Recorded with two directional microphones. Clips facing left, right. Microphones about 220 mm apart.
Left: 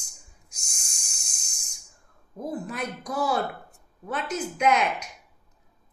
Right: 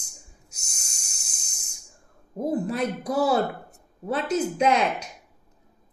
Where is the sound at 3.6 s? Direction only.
30° right (ahead or behind).